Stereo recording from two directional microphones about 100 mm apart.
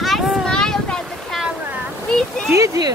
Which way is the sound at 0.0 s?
Centre (ahead or behind).